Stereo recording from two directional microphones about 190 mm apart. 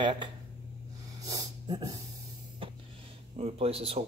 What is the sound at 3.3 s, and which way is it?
Speech, 30° right (ahead or behind).